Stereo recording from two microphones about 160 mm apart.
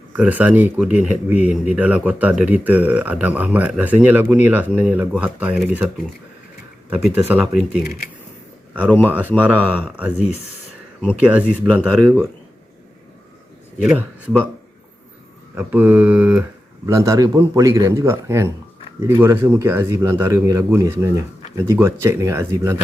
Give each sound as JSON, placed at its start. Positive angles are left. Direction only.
{"t": 0.2, "sound": "speech", "side_deg": -10}
{"t": 6.9, "sound": "speech", "side_deg": -10}
{"t": 8.9, "sound": "speech", "side_deg": 10}
{"t": 9.4, "sound": "speech", "side_deg": -10}
{"t": 11.2, "sound": "speech", "side_deg": -10}
{"t": 13.9, "sound": "speech", "side_deg": -10}
{"t": 15.5, "sound": "speech", "side_deg": -10}
{"t": 16.8, "sound": "a man's voice", "side_deg": -20}